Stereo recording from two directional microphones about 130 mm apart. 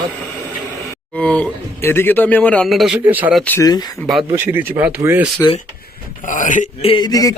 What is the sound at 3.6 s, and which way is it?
Speech, 30° left (ahead or behind).